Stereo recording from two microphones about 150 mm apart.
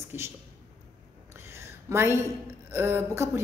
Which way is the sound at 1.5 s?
15° right (ahead or behind).